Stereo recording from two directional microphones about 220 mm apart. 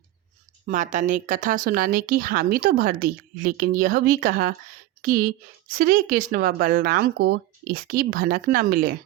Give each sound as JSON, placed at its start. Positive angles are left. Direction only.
{"t": 0.7, "sound": "speech", "side_deg": -35}